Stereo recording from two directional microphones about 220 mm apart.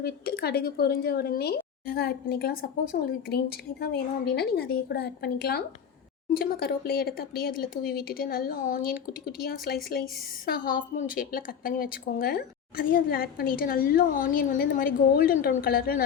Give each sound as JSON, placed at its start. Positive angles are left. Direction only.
{"t": 0.0, "sound": "speech", "side_deg": 45}